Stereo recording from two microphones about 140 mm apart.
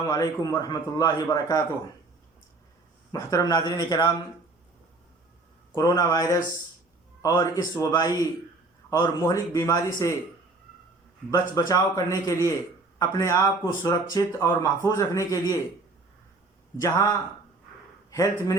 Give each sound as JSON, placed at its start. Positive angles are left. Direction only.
{"t": 0.0, "sound": "speech", "side_deg": 25}
{"t": 3.1, "sound": "speech", "side_deg": 25}
{"t": 5.7, "sound": "speech", "side_deg": 25}
{"t": 11.3, "sound": "speech", "side_deg": 25}
{"t": 16.8, "sound": "speech", "side_deg": 25}